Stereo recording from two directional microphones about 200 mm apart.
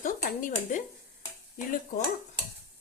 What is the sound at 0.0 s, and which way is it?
Dishes, 40° left (ahead or behind).